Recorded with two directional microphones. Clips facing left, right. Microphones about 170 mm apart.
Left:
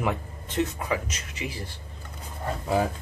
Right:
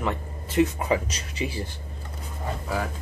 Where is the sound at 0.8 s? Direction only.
30° right (ahead or behind).